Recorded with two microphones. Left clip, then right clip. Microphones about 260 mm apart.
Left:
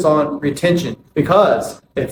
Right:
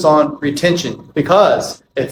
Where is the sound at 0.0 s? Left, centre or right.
Right.